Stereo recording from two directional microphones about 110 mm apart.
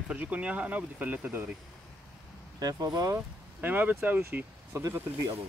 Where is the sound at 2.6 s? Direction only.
35° right (ahead or behind).